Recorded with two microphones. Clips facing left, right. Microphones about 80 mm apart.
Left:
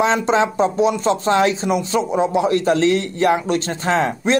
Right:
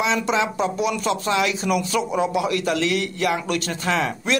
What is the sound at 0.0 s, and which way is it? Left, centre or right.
Speech, left.